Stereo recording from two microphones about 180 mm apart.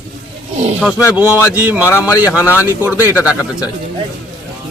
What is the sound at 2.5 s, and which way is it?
Speech, 10° right (ahead or behind).